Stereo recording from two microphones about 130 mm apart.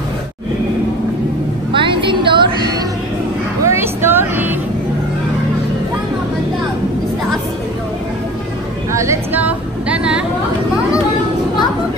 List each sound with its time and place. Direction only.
1.7 s music: 40° right (ahead or behind)
3.6 s vehicle: 20° right (ahead or behind)
8.9 s a sound: 20° right (ahead or behind)